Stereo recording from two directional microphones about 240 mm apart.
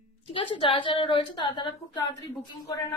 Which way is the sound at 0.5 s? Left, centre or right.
Left.